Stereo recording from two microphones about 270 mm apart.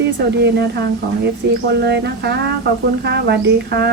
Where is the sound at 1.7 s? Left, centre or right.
Right.